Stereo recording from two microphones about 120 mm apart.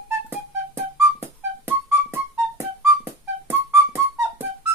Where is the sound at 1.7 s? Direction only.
20° right (ahead or behind).